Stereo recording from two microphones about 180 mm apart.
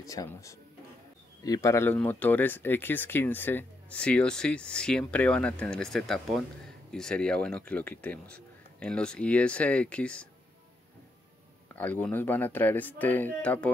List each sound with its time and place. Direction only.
0.0 s speech: 20° left (ahead or behind)
11.7 s speech: 10° left (ahead or behind)